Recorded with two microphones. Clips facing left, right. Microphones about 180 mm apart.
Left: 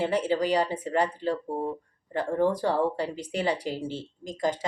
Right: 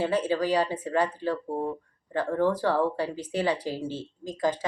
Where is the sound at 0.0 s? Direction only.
15° left (ahead or behind).